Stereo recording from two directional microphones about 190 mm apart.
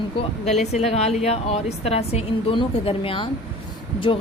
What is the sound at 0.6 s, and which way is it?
Speech, 35° left (ahead or behind).